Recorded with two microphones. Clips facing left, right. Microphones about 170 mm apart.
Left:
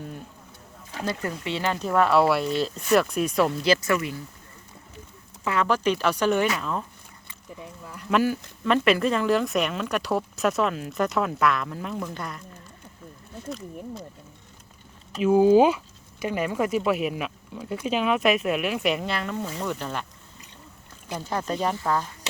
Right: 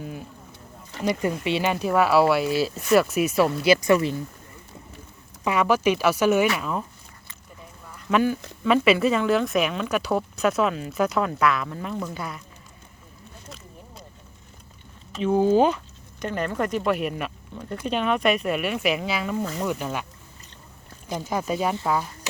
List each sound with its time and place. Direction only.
0.0 s speech: 5° right (ahead or behind)
1.5 s speech: 15° right (ahead or behind)
3.9 s speech: 30° right (ahead or behind)
5.5 s speech: 10° right (ahead or behind)
8.1 s speech: centre (ahead or behind)
15.1 s speech: 5° left (ahead or behind); by 20.1 s 10° right (ahead or behind)
21.1 s speech: 10° right (ahead or behind)